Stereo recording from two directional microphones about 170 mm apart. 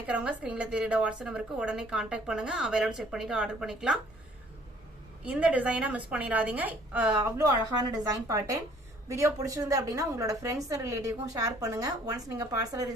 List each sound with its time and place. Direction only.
0.1 s a woman's voice: 5° right (ahead or behind)
5.2 s a woman's voice: 10° right (ahead or behind)